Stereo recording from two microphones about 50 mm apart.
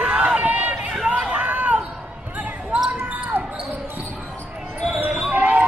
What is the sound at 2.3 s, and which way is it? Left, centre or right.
Basketball bounce, right.